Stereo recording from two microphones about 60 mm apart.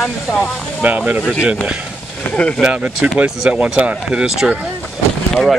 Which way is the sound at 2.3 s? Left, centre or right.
Left.